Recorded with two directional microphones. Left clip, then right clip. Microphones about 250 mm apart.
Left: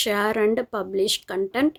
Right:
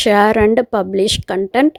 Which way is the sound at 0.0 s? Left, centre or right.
Right.